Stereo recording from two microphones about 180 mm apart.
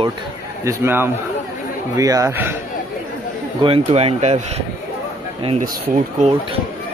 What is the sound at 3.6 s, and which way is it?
Speech, 35° right (ahead or behind).